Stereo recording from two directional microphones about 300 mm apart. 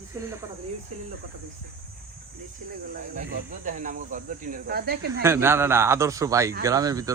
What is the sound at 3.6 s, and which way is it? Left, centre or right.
Speech, right.